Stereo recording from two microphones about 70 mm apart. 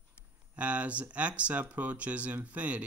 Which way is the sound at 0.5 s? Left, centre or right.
Centre.